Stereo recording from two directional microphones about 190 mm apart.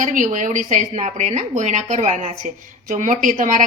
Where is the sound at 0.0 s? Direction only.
40° right (ahead or behind).